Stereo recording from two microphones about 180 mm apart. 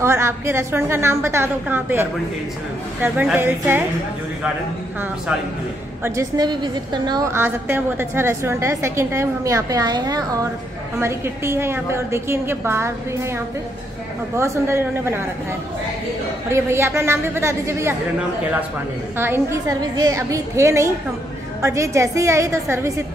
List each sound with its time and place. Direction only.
0.0 s a woman's voice: 15° right (ahead or behind)
6.0 s a woman's voice: 20° right (ahead or behind)
7.4 s a woman's voice: 10° right (ahead or behind)
16.4 s a woman's voice: 15° right (ahead or behind)
19.1 s a woman's voice: 10° right (ahead or behind)